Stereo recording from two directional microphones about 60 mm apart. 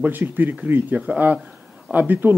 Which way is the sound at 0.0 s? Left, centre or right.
Right.